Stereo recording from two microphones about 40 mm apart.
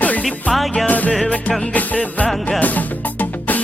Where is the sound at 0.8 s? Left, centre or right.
Left.